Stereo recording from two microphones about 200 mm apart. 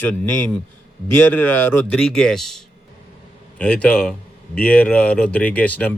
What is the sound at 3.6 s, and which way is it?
Speech, 5° left (ahead or behind).